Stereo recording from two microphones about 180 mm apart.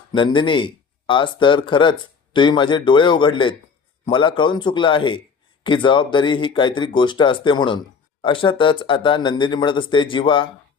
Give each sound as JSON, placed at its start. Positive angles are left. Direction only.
{"t": 0.1, "sound": "speech", "side_deg": 25}